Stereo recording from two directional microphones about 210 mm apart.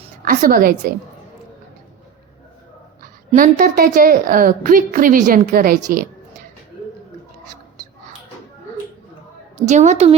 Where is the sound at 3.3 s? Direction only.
40° right (ahead or behind).